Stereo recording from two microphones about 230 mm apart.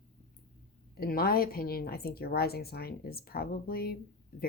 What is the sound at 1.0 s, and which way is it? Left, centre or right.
A woman's voice, left.